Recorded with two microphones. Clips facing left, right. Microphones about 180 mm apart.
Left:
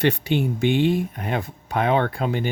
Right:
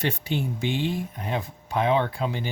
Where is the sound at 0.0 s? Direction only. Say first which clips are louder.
Left 6 dB; 65° left (ahead or behind).